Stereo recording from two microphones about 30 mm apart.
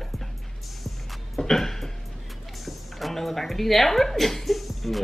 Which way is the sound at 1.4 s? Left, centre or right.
Centre.